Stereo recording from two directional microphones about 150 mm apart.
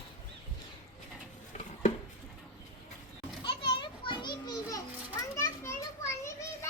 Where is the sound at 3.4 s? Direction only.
35° left (ahead or behind).